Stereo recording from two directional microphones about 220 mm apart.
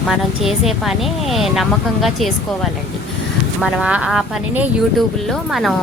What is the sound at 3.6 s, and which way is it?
A woman's voice, 5° right (ahead or behind).